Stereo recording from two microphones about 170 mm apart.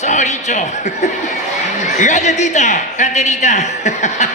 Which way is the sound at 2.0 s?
45° left (ahead or behind).